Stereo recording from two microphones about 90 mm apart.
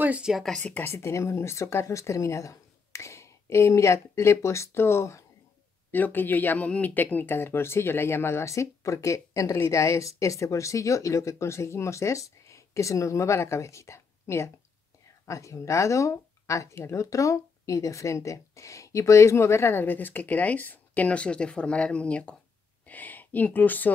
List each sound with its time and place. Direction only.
0.0 s speech: 15° right (ahead or behind)
0.3 s speech: centre (ahead or behind)
0.6 s speech: 20° left (ahead or behind)